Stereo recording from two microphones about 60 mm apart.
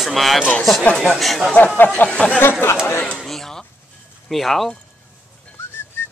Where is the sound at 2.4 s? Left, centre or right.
Left.